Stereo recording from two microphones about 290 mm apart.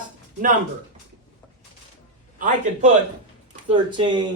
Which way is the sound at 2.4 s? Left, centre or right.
Right.